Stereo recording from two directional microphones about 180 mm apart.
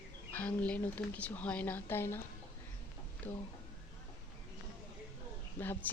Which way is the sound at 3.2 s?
10° left (ahead or behind).